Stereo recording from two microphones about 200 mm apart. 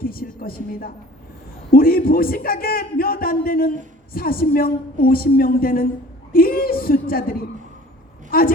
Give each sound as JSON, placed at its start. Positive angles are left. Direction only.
{"t": 0.0, "sound": "a man's voice", "side_deg": 45}